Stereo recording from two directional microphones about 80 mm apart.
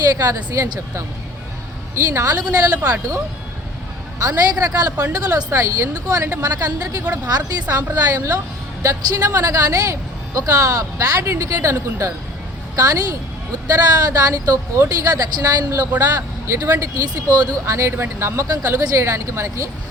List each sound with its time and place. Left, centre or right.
0.2 s a man's voice: right
2.0 s a man's voice: right
4.2 s a man's voice: right
5.5 s a man's voice: right
12.7 s a man's voice: right
17.7 s speech: right
18.4 s speech: right